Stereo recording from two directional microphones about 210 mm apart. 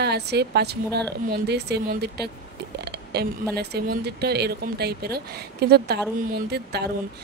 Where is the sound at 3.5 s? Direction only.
50° right (ahead or behind).